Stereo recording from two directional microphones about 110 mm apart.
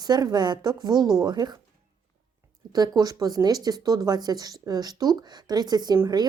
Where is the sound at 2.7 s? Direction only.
35° right (ahead or behind).